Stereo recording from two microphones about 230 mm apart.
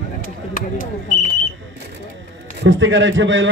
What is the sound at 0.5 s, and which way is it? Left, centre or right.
Speech, left.